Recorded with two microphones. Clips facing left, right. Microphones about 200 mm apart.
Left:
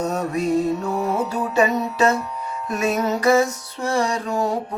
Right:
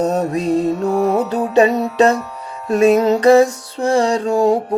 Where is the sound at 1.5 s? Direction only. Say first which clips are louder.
Right 7 dB; 30° right (ahead or behind).